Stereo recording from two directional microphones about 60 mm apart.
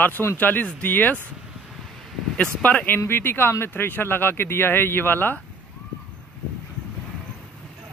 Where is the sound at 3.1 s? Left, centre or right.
Left.